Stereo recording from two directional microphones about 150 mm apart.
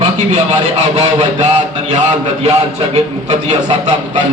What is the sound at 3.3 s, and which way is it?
Speech, 50° right (ahead or behind).